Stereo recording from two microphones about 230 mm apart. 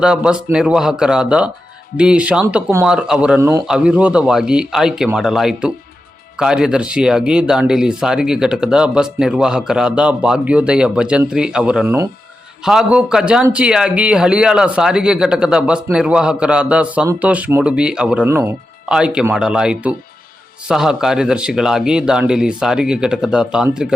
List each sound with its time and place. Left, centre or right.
0.0 s speech: centre